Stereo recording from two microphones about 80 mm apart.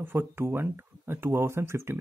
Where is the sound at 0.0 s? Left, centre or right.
Right.